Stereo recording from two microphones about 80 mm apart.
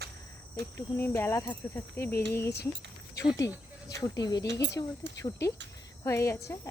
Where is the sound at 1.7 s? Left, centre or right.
Left.